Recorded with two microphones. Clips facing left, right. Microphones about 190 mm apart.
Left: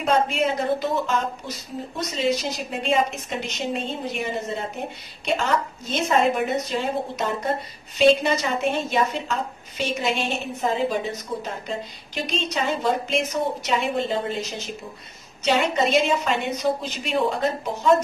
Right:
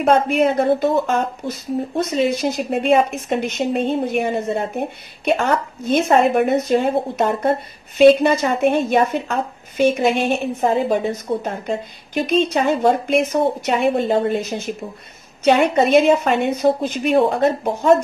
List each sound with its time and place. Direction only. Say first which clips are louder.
0.0 s a woman's voice: right 6 dB; 55° right (ahead or behind)